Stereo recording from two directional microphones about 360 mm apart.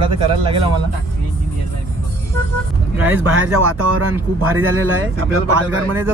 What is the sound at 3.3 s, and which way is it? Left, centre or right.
Speech, right.